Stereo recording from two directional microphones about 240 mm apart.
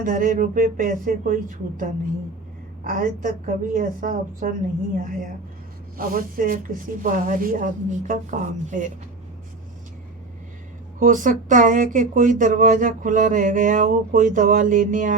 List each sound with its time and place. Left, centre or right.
0.0 s speech: right
6.0 s speech: right
11.0 s speech: right